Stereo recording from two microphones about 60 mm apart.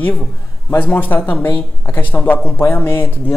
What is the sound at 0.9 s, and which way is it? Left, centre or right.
A woman's voice, left.